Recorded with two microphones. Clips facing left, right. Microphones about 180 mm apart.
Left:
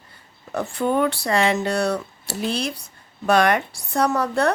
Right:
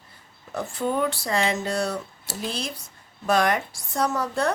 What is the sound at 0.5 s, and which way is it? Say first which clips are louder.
Speech: left 4 dB; 65° left (ahead or behind).